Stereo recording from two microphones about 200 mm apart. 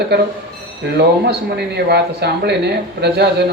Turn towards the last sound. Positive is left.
turn(degrees=-55)  # may be behind; listen again after turning